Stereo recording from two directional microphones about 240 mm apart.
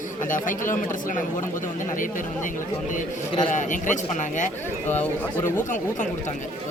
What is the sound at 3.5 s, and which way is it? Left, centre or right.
Speech, left.